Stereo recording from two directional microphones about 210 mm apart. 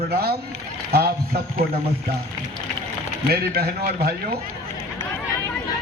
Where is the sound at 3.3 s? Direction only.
45° right (ahead or behind).